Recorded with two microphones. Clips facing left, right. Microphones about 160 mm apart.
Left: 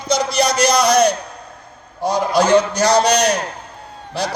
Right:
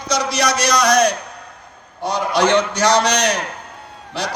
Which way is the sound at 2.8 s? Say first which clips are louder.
Left 2 dB; 35° left (ahead or behind).